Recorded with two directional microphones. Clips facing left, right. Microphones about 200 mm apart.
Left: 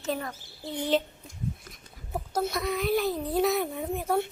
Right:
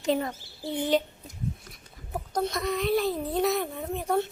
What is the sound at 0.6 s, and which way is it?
Speech, 10° right (ahead or behind).